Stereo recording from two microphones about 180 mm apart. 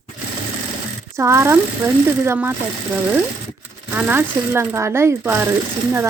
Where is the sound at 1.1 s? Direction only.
15° right (ahead or behind).